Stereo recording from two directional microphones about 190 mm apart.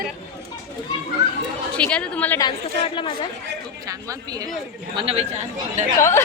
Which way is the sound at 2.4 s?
25° left (ahead or behind).